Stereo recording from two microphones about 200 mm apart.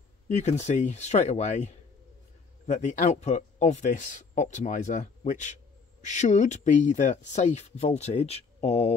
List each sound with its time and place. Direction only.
0.5 s speech: 35° left (ahead or behind)